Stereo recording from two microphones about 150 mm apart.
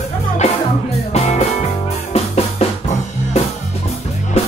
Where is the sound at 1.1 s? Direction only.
45° left (ahead or behind).